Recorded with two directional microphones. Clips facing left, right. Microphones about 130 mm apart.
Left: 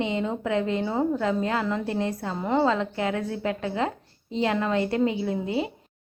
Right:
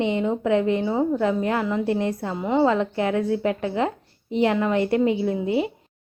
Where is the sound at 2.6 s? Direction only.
20° right (ahead or behind).